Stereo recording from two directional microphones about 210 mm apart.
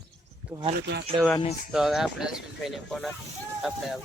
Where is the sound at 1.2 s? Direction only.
20° right (ahead or behind).